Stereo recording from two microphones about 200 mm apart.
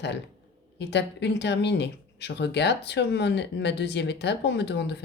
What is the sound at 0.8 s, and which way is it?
Speech, 60° left (ahead or behind).